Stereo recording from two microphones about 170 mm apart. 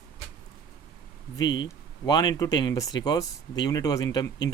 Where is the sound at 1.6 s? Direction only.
25° left (ahead or behind).